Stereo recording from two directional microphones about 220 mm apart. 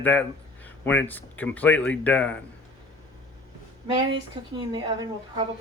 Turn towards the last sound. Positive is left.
turn(degrees=-20)  # may be behind; listen again after turning